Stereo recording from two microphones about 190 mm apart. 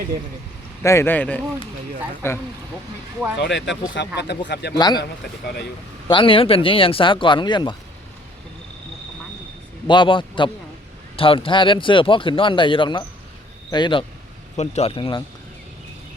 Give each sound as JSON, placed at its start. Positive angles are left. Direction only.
{"t": 0.8, "sound": "speech", "side_deg": 15}
{"t": 3.3, "sound": "speech", "side_deg": 65}
{"t": 4.8, "sound": "speech", "side_deg": 20}
{"t": 6.1, "sound": "speech", "side_deg": 25}
{"t": 9.8, "sound": "speech", "side_deg": 25}
{"t": 14.5, "sound": "speech", "side_deg": 35}